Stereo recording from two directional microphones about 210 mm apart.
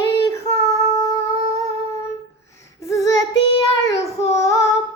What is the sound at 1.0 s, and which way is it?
Humming, 15° left (ahead or behind).